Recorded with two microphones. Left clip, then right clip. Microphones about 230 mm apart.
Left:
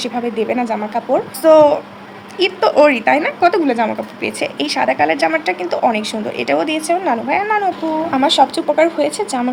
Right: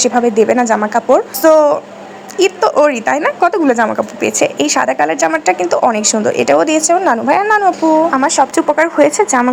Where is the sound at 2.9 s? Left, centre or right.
Centre.